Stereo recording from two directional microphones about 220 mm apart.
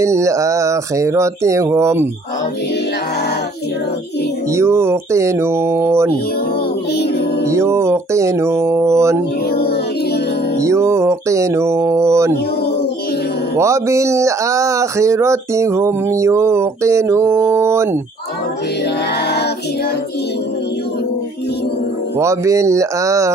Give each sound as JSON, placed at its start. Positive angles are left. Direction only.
{"t": 0.0, "sound": "speech", "side_deg": -15}
{"t": 4.5, "sound": "speech", "side_deg": -10}
{"t": 7.5, "sound": "speech", "side_deg": -10}
{"t": 10.6, "sound": "a sound", "side_deg": -15}
{"t": 13.6, "sound": "speech", "side_deg": -15}
{"t": 19.2, "sound": "child singing", "side_deg": 50}
{"t": 22.2, "sound": "speech", "side_deg": -15}